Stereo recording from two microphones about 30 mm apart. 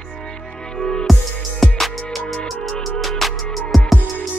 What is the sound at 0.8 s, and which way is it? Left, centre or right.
Music, left.